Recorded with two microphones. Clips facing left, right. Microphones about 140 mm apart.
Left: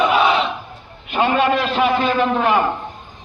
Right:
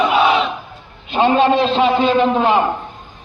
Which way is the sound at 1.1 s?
25° right (ahead or behind).